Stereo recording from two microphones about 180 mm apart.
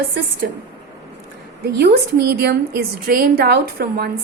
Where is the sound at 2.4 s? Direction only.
60° right (ahead or behind).